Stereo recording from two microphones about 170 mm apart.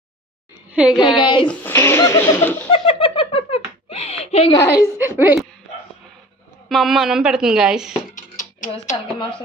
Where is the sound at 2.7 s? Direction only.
30° left (ahead or behind).